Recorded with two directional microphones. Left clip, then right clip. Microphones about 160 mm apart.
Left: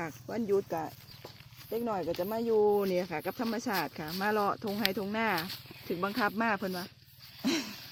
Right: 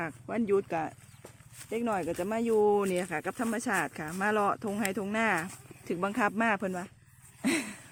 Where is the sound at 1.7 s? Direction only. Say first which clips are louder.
Right 2 dB; 50° right (ahead or behind).